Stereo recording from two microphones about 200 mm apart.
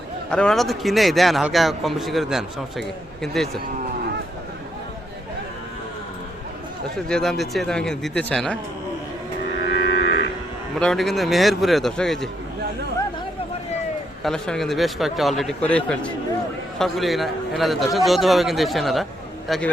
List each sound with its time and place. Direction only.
0.3 s speech: 5° left (ahead or behind)
6.9 s speech: centre (ahead or behind)
9.7 s livestock: 55° left (ahead or behind)
10.8 s speech: centre (ahead or behind)
14.3 s speech: 5° left (ahead or behind)